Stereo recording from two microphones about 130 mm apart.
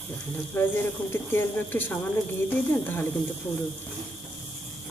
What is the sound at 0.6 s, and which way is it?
Speech, 15° left (ahead or behind).